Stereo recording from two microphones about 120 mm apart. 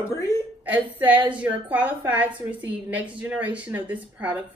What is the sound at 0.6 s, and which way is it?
A woman's voice, 15° right (ahead or behind).